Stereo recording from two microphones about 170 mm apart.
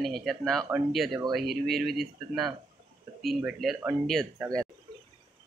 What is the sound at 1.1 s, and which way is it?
Speech, 25° right (ahead or behind).